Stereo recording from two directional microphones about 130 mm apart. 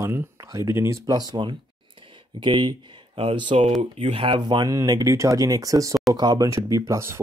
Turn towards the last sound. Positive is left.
turn(degrees=-20)  # may be behind; listen again after turning